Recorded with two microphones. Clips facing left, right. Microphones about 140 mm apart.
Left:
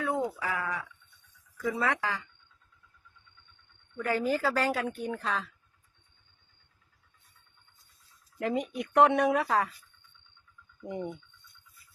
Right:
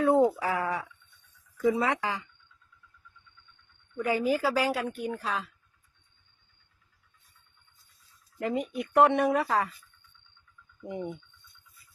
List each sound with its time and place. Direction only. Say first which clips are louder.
0.3 s speech: right 5 dB; 35° right (ahead or behind)
1.7 s speech: right 2 dB; 20° right (ahead or behind)
3.9 s speech: right 2 dB; 15° right (ahead or behind)
8.4 s speech: even; centre (ahead or behind)
10.8 s speech: even; 5° right (ahead or behind)